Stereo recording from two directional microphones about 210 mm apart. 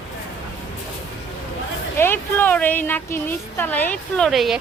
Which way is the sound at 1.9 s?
10° left (ahead or behind).